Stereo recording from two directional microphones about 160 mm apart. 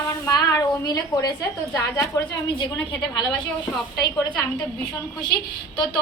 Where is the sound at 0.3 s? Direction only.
20° left (ahead or behind).